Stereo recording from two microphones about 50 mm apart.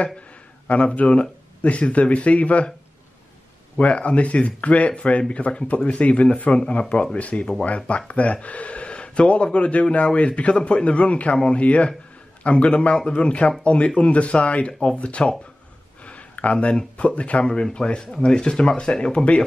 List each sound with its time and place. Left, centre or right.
0.7 s speech: left
3.7 s speech: left
17.5 s speech: centre